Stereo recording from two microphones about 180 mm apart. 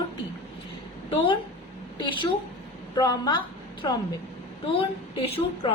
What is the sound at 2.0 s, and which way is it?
A woman's voice, 25° left (ahead or behind).